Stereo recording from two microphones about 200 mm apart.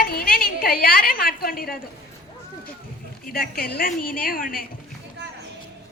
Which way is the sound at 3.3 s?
50° left (ahead or behind).